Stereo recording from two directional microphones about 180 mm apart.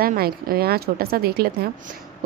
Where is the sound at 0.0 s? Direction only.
55° right (ahead or behind).